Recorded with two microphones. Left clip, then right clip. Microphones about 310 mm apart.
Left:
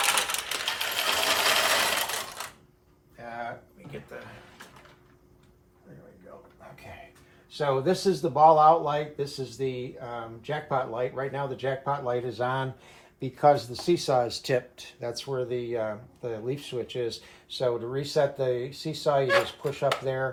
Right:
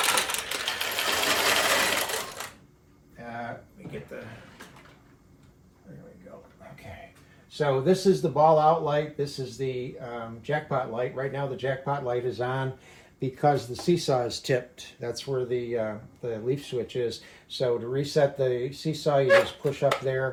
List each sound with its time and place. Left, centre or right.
0.0 s sewing machine: centre
7.6 s speech: centre